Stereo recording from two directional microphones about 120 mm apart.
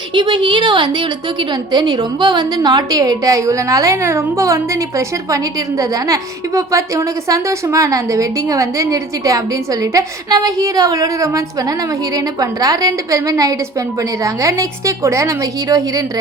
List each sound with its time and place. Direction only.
0.1 s a woman's voice: 40° right (ahead or behind)